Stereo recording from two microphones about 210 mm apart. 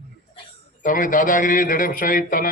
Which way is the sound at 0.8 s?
40° left (ahead or behind).